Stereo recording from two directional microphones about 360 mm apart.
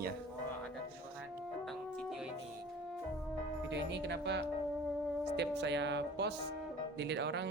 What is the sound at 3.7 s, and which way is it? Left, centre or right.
A man's voice, right.